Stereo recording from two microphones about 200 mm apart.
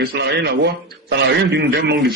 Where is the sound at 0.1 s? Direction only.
55° right (ahead or behind).